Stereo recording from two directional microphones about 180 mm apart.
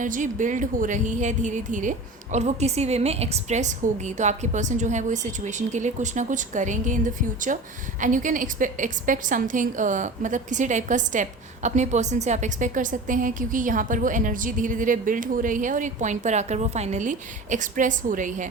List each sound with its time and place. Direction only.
0.0 s a woman's voice: 45° right (ahead or behind)